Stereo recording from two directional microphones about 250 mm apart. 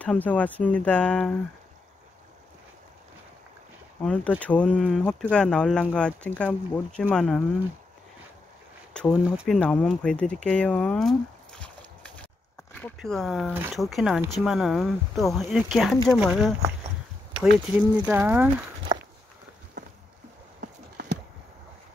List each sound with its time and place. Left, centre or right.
0.0 s speech: centre
4.0 s speech: centre
8.9 s speech: centre
17.9 s speech: centre
20.6 s a sound: right